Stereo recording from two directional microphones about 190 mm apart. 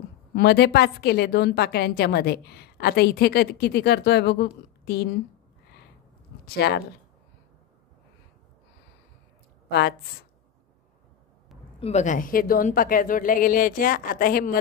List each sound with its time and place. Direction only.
0.4 s a woman's voice: 60° left (ahead or behind)
6.4 s speech: 55° left (ahead or behind)
9.7 s a woman's voice: 55° left (ahead or behind)
11.8 s a woman's voice: 35° left (ahead or behind)